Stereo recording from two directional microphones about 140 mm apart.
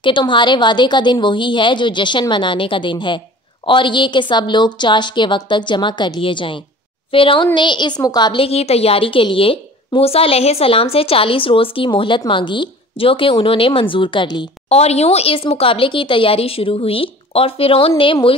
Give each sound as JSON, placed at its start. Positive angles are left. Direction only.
{"t": 0.0, "sound": "a woman's voice", "side_deg": 35}
{"t": 14.7, "sound": "a woman's voice", "side_deg": 50}